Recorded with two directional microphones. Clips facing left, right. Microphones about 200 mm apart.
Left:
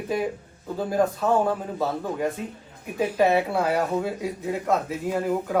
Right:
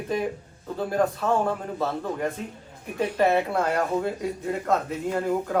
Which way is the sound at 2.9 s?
5° left (ahead or behind).